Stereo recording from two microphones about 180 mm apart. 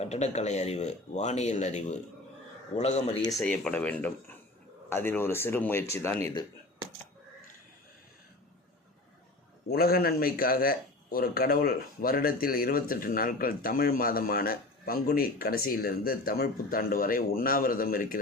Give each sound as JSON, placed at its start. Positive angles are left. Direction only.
{"t": 0.0, "sound": "speech", "side_deg": 35}
{"t": 3.2, "sound": "speech", "side_deg": 20}
{"t": 3.4, "sound": "speech", "side_deg": 5}
{"t": 9.6, "sound": "a man's voice", "side_deg": 60}